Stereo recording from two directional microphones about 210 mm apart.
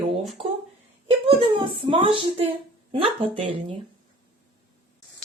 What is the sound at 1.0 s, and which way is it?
A woman's voice, 25° right (ahead or behind).